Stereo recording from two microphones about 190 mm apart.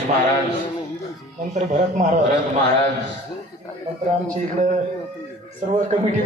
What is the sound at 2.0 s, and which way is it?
Speech, 40° right (ahead or behind).